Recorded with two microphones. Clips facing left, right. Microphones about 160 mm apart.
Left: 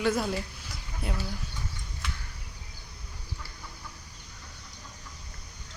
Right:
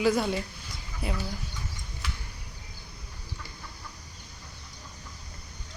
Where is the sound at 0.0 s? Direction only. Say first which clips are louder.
Right 2 dB; centre (ahead or behind).